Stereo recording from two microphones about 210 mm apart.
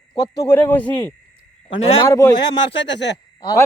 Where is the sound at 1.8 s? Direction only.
30° left (ahead or behind).